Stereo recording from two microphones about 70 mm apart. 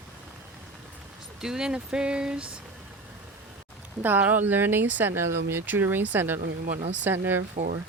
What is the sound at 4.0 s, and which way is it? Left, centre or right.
Speech, right.